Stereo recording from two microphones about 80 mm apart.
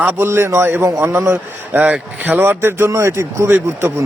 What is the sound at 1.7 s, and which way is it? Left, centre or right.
A man's voice, centre.